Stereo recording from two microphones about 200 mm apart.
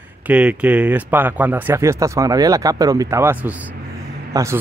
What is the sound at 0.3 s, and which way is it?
Speech, 5° right (ahead or behind).